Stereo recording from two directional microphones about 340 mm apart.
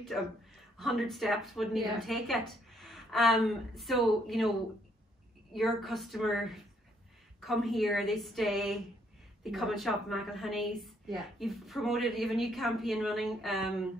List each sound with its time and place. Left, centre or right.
0.1 s a woman's voice: centre